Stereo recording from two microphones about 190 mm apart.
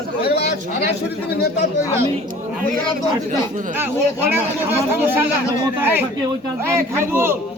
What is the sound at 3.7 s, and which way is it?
Speech, 10° right (ahead or behind).